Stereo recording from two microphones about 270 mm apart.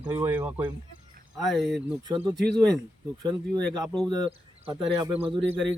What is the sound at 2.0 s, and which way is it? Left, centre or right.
Speech, centre.